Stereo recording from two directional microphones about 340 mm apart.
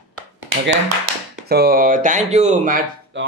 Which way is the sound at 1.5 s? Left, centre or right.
Right.